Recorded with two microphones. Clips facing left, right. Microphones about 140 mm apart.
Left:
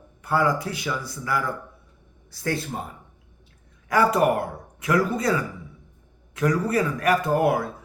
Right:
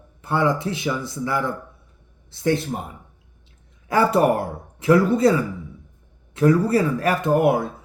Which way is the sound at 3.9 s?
30° right (ahead or behind).